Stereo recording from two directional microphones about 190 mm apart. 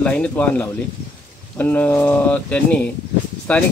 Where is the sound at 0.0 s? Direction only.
5° left (ahead or behind).